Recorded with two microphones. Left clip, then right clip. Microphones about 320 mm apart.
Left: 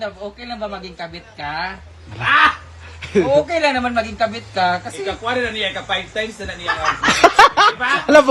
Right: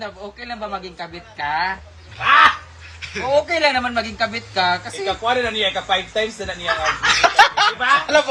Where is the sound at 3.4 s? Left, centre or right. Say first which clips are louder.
Left 1 dB; centre.